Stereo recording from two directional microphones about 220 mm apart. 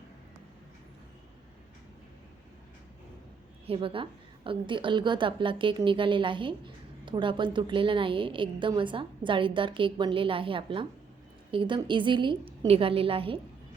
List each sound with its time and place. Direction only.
3.7 s a woman's voice: 25° right (ahead or behind)